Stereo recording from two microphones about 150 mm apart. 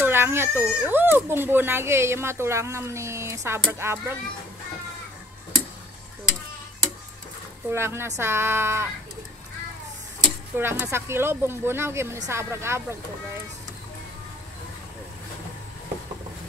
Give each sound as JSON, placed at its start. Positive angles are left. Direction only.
{"t": 0.0, "sound": "speech", "side_deg": -15}
{"t": 7.7, "sound": "speech", "side_deg": -15}
{"t": 10.5, "sound": "speech", "side_deg": -15}